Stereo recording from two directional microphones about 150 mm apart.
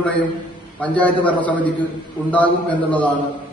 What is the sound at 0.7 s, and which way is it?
A man's voice, 10° left (ahead or behind).